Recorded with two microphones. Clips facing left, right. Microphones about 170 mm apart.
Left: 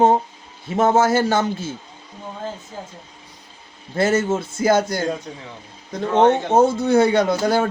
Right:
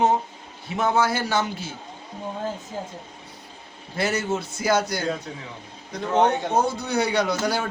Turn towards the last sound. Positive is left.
turn(degrees=50)  # may be behind; listen again after turning